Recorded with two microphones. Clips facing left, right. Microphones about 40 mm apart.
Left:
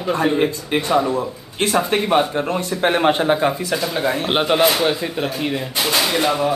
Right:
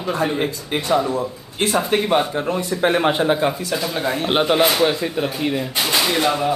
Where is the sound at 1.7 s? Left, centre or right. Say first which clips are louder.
Left 1 dB; centre.